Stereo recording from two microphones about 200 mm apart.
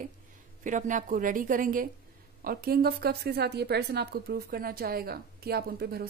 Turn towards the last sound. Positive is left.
turn(degrees=-50)  # may be behind; listen again after turning